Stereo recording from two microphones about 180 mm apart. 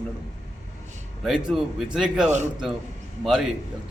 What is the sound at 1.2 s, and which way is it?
A man's voice, 5° right (ahead or behind).